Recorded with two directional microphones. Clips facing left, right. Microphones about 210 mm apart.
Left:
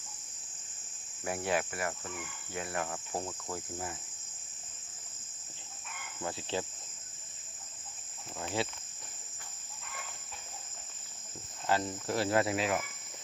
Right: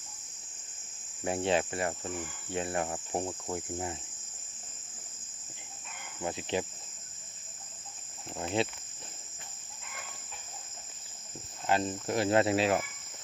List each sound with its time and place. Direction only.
1.2 s cricket: 25° right (ahead or behind)
6.2 s insect: 15° right (ahead or behind)
8.6 s cricket: 20° right (ahead or behind)
11.6 s cricket: 20° right (ahead or behind)